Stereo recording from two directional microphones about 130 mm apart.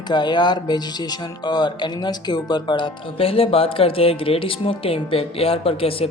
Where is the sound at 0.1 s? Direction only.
35° left (ahead or behind).